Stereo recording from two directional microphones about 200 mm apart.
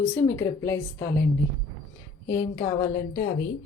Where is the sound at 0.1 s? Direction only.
15° left (ahead or behind).